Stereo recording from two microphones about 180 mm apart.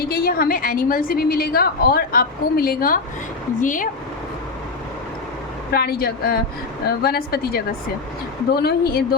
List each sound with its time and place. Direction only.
0.0 s a woman's voice: 55° left (ahead or behind)
5.7 s a woman's voice: 60° left (ahead or behind)